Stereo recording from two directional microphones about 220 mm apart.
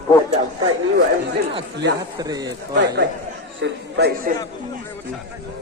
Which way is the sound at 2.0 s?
15° right (ahead or behind).